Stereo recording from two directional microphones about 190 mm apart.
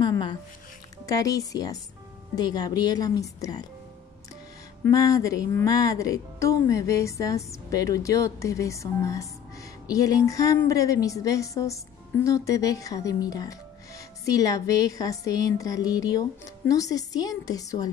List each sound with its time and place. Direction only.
0.0 s music: 20° left (ahead or behind)
1.0 s speech: 20° left (ahead or behind)
4.8 s speech: 15° left (ahead or behind)